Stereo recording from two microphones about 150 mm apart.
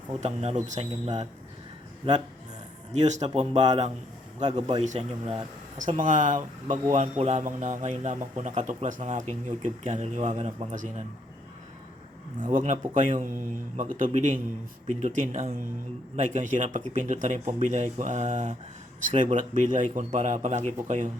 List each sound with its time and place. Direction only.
0.2 s speech: 50° right (ahead or behind)
2.9 s speech: 50° right (ahead or behind)
6.0 s speech: 60° right (ahead or behind)
12.4 s speech: 60° right (ahead or behind)